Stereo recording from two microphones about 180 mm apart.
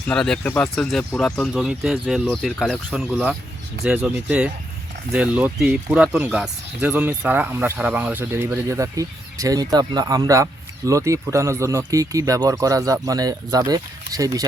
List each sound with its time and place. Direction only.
0.1 s speech: 5° left (ahead or behind); by 14.4 s 20° right (ahead or behind)